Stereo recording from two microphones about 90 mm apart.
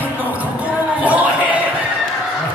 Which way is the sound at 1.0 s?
15° right (ahead or behind).